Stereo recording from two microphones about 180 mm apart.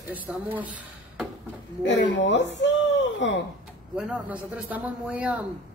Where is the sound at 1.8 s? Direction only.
90° left.